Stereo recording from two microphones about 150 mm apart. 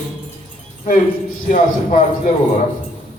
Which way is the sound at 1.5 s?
60° left (ahead or behind).